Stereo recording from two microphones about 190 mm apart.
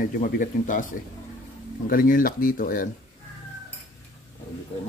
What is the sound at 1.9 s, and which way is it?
Speech, 50° left (ahead or behind).